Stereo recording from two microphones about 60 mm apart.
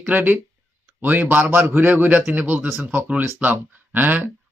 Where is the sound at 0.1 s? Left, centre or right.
Right.